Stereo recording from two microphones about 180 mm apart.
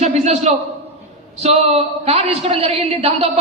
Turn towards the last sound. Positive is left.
turn(degrees=-35)  # may be behind; listen again after turning